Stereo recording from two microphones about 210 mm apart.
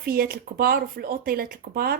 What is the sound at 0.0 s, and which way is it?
A woman's voice, 45° right (ahead or behind).